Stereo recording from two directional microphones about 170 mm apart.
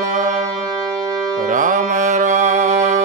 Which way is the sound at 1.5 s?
50° right (ahead or behind).